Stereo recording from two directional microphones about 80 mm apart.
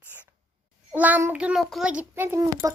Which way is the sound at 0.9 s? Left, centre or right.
Right.